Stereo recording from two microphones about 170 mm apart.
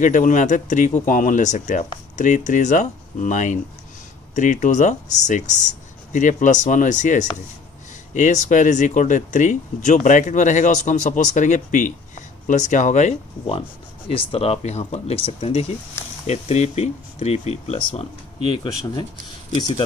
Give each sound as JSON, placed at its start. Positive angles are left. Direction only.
{"t": 0.0, "sound": "speech", "side_deg": 50}
{"t": 18.6, "sound": "speech", "side_deg": 20}